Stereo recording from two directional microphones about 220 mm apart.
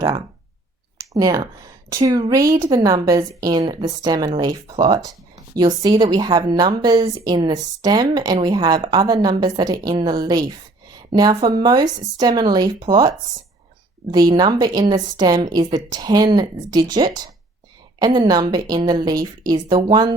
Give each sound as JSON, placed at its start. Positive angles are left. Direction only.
{"t": 0.9, "sound": "a woman's voice", "side_deg": -15}